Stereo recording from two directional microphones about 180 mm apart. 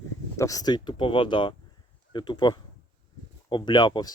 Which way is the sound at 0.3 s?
20° left (ahead or behind).